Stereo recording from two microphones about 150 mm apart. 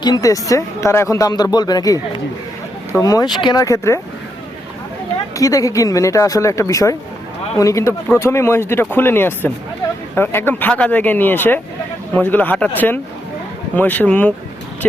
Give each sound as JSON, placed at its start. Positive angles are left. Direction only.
{"t": 0.0, "sound": "speech", "side_deg": 25}
{"t": 3.0, "sound": "speech", "side_deg": 25}
{"t": 5.4, "sound": "speech", "side_deg": 20}